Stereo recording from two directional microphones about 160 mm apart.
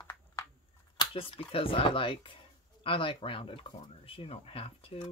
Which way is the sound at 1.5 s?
35° left (ahead or behind).